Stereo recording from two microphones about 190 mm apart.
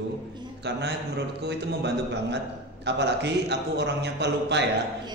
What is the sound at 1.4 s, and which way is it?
A man's voice, 65° right (ahead or behind).